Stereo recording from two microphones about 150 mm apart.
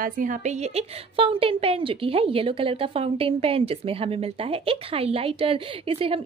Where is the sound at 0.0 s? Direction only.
60° right (ahead or behind).